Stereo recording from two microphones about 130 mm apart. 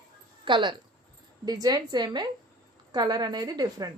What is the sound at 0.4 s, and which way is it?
Speech, 40° right (ahead or behind).